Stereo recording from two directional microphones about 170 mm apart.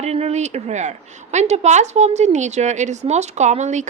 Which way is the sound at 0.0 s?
40° right (ahead or behind).